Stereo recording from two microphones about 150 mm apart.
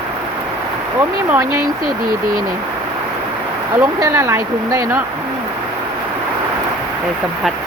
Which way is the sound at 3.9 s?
20° right (ahead or behind).